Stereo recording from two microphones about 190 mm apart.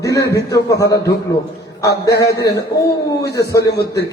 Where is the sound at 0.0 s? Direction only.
15° left (ahead or behind).